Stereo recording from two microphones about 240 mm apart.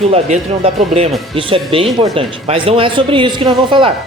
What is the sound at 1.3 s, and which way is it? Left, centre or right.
Speech, right.